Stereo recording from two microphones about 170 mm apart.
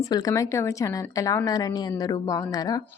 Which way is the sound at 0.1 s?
20° left (ahead or behind).